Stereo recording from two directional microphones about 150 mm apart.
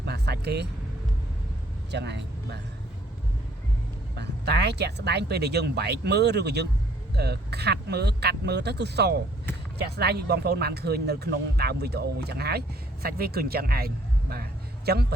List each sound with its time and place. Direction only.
0.0 s vehicle: 90° right
4.1 s speech: 90° right